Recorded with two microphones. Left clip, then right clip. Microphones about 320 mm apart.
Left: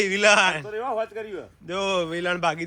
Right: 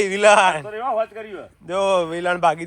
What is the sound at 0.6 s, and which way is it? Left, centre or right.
Speech, right.